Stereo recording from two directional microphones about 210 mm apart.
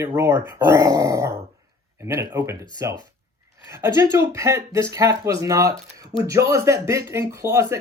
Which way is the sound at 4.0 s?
15° right (ahead or behind).